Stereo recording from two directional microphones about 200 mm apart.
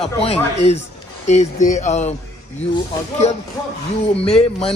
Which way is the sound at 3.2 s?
30° left (ahead or behind).